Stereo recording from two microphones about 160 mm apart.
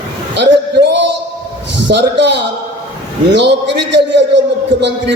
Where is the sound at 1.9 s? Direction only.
90° right.